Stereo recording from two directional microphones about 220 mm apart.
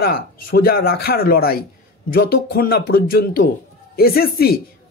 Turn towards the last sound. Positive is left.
turn(degrees=45)  # may be behind; listen again after turning